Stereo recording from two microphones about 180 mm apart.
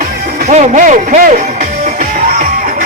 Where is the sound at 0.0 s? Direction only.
45° right (ahead or behind).